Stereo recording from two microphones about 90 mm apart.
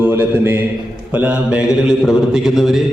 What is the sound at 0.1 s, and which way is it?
Speech, 25° right (ahead or behind).